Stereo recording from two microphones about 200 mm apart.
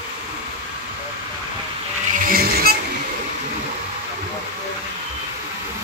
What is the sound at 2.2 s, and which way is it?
Vehicle, 50° right (ahead or behind).